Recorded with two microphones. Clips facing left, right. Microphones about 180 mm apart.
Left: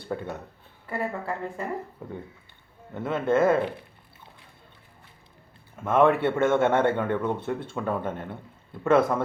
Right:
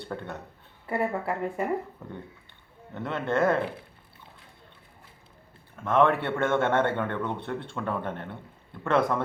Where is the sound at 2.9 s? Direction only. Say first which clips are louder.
Left 4 dB; 5° left (ahead or behind).